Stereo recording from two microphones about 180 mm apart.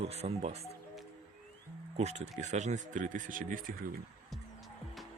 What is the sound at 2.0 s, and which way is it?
Speech, 40° right (ahead or behind).